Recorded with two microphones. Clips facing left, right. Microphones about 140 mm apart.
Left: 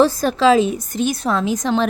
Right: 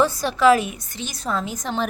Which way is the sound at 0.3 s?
25° left (ahead or behind).